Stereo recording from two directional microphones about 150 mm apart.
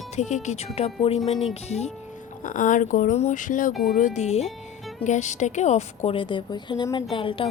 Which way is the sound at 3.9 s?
50° left (ahead or behind).